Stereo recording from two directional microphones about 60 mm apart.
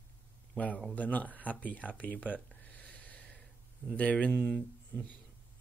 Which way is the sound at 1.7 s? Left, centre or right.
Left.